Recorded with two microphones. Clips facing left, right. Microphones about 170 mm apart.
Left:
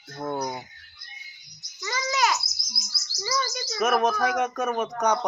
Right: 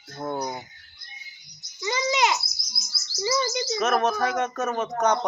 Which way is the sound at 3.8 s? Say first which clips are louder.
Left 1 dB; 10° left (ahead or behind).